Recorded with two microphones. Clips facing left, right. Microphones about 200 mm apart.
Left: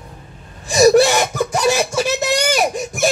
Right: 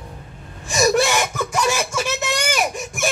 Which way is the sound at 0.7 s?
35° left (ahead or behind).